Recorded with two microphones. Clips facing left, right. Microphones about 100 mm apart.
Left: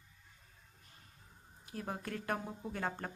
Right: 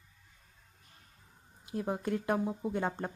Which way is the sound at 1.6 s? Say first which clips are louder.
Right 8 dB; 20° right (ahead or behind).